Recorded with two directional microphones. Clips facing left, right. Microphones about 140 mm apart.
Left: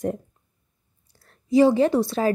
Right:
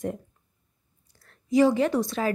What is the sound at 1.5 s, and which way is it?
Speech, 30° left (ahead or behind).